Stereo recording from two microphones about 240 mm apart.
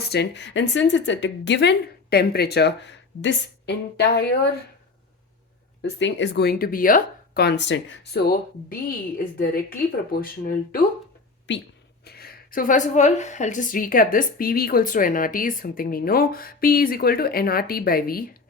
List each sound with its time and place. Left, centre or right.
0.0 s speech: left
5.8 s a woman's voice: left
11.5 s a woman's voice: left